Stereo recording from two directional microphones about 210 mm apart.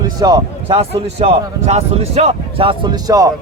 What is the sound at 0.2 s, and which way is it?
A man's voice, 20° right (ahead or behind).